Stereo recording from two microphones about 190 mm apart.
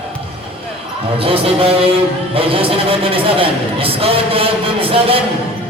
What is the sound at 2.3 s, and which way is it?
Speech, 30° right (ahead or behind).